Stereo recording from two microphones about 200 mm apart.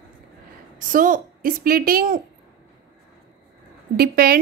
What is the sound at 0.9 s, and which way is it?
A woman's voice, 40° right (ahead or behind).